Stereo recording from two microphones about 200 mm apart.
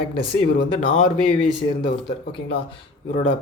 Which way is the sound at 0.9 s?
25° left (ahead or behind).